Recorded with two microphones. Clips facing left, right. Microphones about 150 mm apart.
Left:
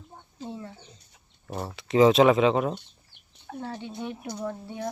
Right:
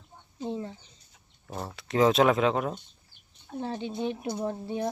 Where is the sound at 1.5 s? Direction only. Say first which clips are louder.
Left 5 dB; centre (ahead or behind).